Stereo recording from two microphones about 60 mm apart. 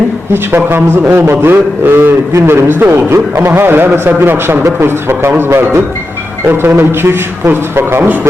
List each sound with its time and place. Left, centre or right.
0.5 s a man's voice: right